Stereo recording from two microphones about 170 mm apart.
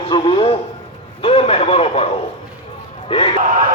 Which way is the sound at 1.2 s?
35° left (ahead or behind).